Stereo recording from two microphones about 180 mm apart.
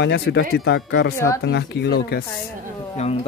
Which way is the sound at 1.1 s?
15° left (ahead or behind).